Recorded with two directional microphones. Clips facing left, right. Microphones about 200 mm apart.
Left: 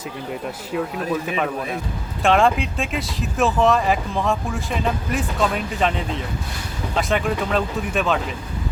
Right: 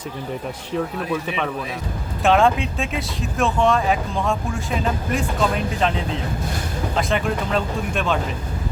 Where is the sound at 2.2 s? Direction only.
Centre (ahead or behind).